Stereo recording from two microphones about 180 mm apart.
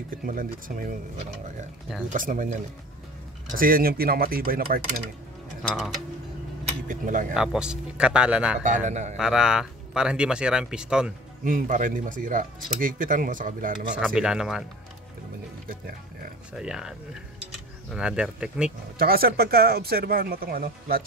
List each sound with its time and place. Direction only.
0.2 s speech: 50° right (ahead or behind)
2.1 s speech: 45° right (ahead or behind)
5.6 s speech: centre (ahead or behind)
6.9 s speech: 45° right (ahead or behind)
7.3 s speech: 5° right (ahead or behind)
8.6 s a man's voice: 45° right (ahead or behind)
9.1 s speech: 5° right (ahead or behind)
11.4 s speech: 45° right (ahead or behind)
13.9 s speech: 5° right (ahead or behind)
16.5 s speech: 5° right (ahead or behind)
17.9 s speech: 5° right (ahead or behind)
18.9 s speech: 55° right (ahead or behind)